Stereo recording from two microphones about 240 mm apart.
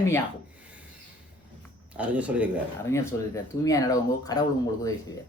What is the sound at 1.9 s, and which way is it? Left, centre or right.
Speech, centre.